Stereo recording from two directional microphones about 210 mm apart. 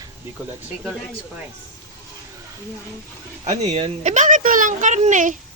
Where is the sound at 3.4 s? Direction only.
30° right (ahead or behind).